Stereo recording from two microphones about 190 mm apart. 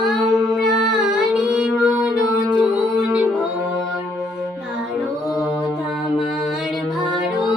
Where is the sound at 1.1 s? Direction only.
5° right (ahead or behind).